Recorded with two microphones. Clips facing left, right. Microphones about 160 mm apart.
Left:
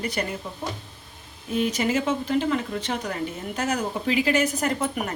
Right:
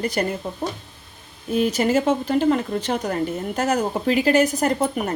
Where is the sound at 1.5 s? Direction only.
45° right (ahead or behind).